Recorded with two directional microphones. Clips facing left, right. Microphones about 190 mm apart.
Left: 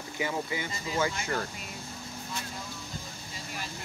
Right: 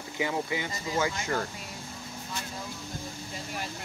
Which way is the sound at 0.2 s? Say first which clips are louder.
Right 2 dB; 20° right (ahead or behind).